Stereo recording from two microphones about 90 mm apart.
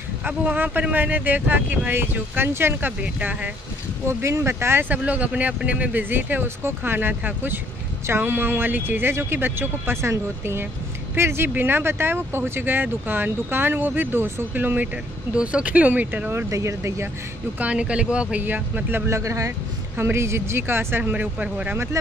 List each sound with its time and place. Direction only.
0.2 s speech: 20° right (ahead or behind)
4.1 s speech: 30° right (ahead or behind)
17.6 s speech: 15° right (ahead or behind)